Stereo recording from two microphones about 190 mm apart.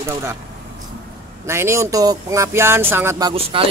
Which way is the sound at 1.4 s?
15° right (ahead or behind).